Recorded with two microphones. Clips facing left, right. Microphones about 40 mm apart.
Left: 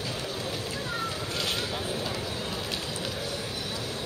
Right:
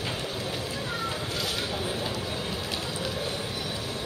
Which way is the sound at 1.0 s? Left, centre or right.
Right.